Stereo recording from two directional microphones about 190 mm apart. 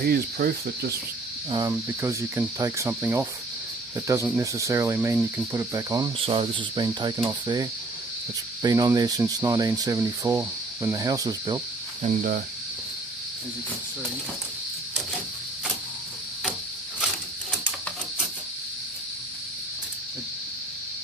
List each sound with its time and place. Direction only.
0.0 s speech: 55° right (ahead or behind)
1.5 s speech: 20° right (ahead or behind)
6.2 s speech: 25° right (ahead or behind)
12.0 s speech: 45° right (ahead or behind)